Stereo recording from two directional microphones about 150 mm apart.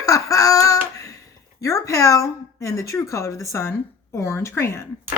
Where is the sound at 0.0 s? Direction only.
20° left (ahead or behind).